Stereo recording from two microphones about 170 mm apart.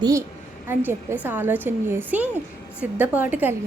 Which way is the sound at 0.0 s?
20° right (ahead or behind).